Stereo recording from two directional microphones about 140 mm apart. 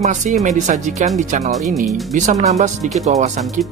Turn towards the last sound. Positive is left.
turn(degrees=-55)  # may be behind; listen again after turning